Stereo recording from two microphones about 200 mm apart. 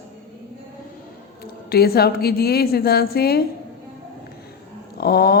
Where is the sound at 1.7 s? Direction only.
50° left (ahead or behind).